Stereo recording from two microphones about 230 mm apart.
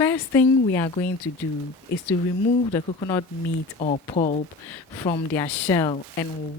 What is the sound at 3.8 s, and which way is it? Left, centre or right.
Speech, left.